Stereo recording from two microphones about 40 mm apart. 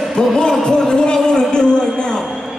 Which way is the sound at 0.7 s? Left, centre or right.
Centre.